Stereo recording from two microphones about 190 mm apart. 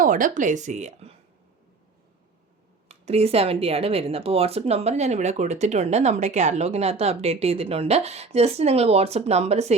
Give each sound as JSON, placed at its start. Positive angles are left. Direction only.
{"t": 0.0, "sound": "speech", "side_deg": -45}
{"t": 2.9, "sound": "speech", "side_deg": -30}